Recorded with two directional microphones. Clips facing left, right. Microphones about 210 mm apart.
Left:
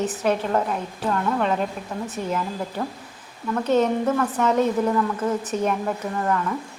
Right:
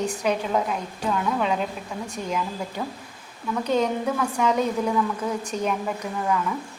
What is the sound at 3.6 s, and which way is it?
Speech, 5° left (ahead or behind).